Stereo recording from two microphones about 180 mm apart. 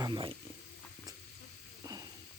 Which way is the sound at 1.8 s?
20° right (ahead or behind).